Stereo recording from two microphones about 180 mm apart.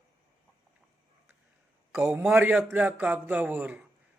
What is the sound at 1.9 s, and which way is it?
Speech, 10° right (ahead or behind).